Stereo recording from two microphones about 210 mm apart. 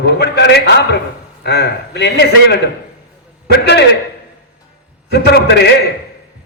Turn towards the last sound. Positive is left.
turn(degrees=50)  # may be behind; listen again after turning